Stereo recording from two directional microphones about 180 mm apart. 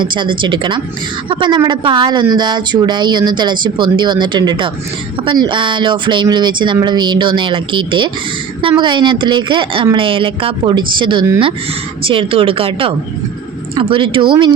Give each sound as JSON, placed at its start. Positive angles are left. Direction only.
{"t": 0.0, "sound": "speech", "side_deg": -25}